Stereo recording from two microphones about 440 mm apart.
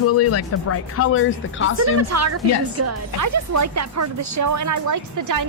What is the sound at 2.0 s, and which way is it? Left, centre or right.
Speech, right.